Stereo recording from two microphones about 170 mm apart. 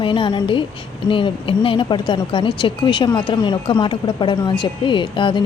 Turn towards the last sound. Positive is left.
turn(degrees=30)  # may be behind; listen again after turning